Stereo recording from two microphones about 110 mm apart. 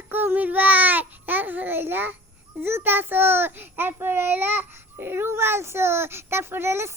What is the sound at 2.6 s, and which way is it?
A child's voice, 20° right (ahead or behind).